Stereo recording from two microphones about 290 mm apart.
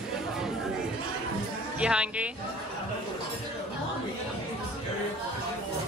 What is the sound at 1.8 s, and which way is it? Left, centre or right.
Speech, centre.